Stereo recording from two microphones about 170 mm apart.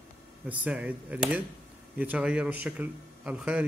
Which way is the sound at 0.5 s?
10° right (ahead or behind).